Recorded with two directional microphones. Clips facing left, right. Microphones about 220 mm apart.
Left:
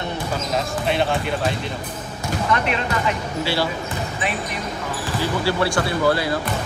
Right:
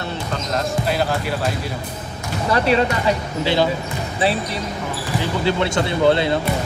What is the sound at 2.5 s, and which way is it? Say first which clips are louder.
Speech: right 7 dB; 35° right (ahead or behind).